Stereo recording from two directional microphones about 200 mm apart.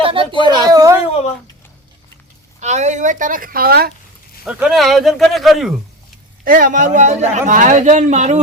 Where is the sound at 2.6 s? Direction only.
35° right (ahead or behind).